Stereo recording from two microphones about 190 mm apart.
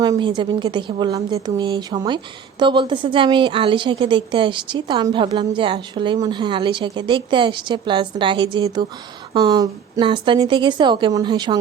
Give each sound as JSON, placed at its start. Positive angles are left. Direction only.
{"t": 0.0, "sound": "a woman's voice", "side_deg": -20}